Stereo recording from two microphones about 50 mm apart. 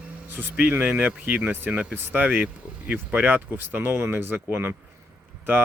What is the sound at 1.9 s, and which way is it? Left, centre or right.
Speech, right.